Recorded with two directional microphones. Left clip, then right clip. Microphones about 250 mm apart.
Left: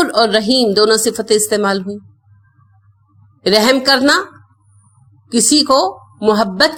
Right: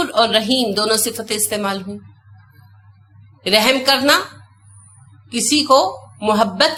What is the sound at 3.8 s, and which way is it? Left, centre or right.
Speech, left.